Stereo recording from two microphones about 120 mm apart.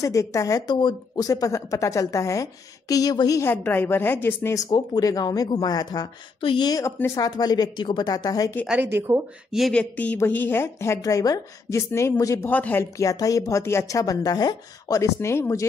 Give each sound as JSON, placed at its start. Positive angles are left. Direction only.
{"t": 0.0, "sound": "speech", "side_deg": 25}
{"t": 3.4, "sound": "a woman's voice", "side_deg": 15}
{"t": 4.6, "sound": "a woman's voice", "side_deg": 35}
{"t": 6.4, "sound": "speech", "side_deg": 45}
{"t": 7.2, "sound": "a woman's voice", "side_deg": 35}
{"t": 8.6, "sound": "speech", "side_deg": -15}
{"t": 9.5, "sound": "a woman's voice", "side_deg": 5}
{"t": 13.0, "sound": "speech", "side_deg": 30}